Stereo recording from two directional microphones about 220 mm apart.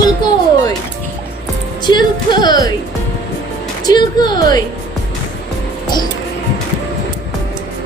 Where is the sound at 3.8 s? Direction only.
20° left (ahead or behind).